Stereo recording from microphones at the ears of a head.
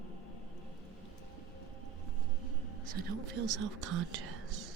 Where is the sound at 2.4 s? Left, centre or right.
Right.